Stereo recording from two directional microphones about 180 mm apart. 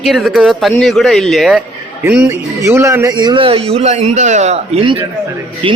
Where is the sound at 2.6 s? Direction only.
15° right (ahead or behind).